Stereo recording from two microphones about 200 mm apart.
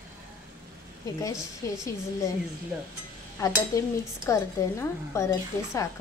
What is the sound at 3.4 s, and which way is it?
Speech, 15° left (ahead or behind).